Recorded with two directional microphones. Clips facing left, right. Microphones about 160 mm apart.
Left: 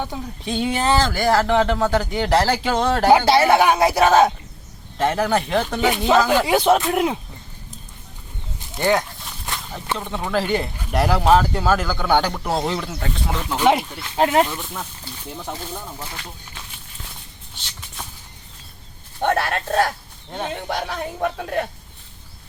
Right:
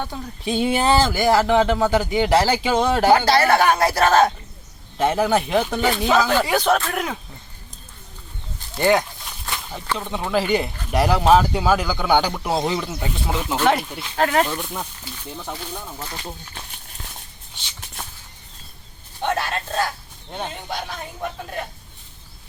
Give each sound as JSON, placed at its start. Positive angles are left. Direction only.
{"t": 0.4, "sound": "speech", "side_deg": -10}
{"t": 3.1, "sound": "speech", "side_deg": 20}
{"t": 4.9, "sound": "a man's voice", "side_deg": -5}
{"t": 6.3, "sound": "speech", "side_deg": 15}
{"t": 8.5, "sound": "a sound", "side_deg": 20}
{"t": 8.8, "sound": "a sound", "side_deg": 0}
{"t": 10.2, "sound": "a man's voice", "side_deg": -5}
{"t": 13.6, "sound": "speech", "side_deg": 15}
{"t": 14.4, "sound": "a man's voice", "side_deg": 0}
{"t": 19.2, "sound": "a man's voice", "side_deg": 60}